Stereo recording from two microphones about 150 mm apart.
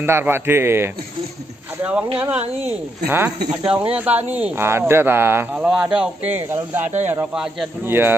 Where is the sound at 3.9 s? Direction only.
10° right (ahead or behind).